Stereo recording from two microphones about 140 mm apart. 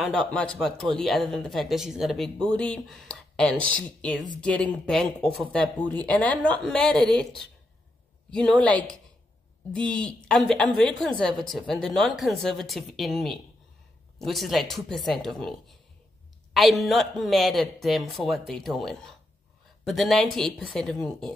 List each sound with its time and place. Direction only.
0.1 s speech: 5° left (ahead or behind)
16.5 s speech: centre (ahead or behind)